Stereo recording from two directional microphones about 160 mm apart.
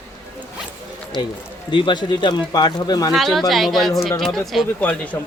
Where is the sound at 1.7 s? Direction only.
30° left (ahead or behind).